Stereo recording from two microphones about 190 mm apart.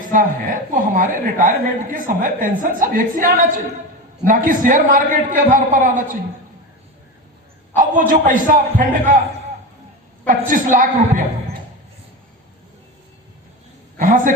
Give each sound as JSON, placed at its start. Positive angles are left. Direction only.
{"t": 0.1, "sound": "a woman's voice", "side_deg": -45}
{"t": 7.8, "sound": "a woman's voice", "side_deg": -45}
{"t": 10.2, "sound": "a woman's voice", "side_deg": -45}
{"t": 14.0, "sound": "a sound", "side_deg": -45}